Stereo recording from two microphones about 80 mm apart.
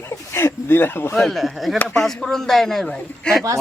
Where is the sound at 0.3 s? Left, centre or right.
Left.